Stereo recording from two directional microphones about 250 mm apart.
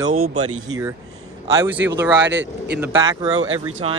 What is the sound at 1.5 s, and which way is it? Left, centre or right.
Speech, centre.